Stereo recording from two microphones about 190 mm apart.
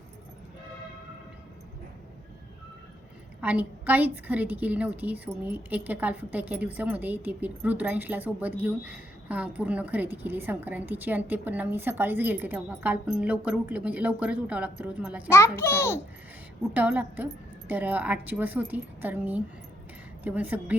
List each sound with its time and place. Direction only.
3.4 s a woman's voice: 10° right (ahead or behind)
15.3 s a child's voice: 15° left (ahead or behind)
16.7 s a woman's voice: 10° right (ahead or behind)